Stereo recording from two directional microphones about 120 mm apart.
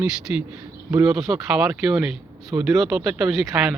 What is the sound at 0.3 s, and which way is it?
Speech, 15° right (ahead or behind).